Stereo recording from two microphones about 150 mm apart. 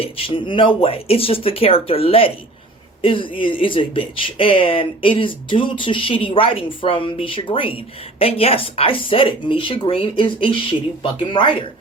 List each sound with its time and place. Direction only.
0.0 s speech: 35° left (ahead or behind)